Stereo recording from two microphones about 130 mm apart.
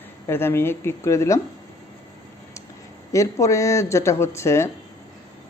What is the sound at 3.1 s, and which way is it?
Speech, 25° left (ahead or behind).